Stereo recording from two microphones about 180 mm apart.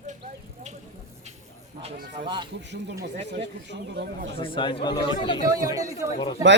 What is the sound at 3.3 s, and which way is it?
A man's voice, 70° right (ahead or behind).